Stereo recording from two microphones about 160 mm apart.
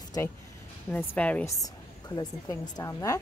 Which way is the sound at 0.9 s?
10° left (ahead or behind).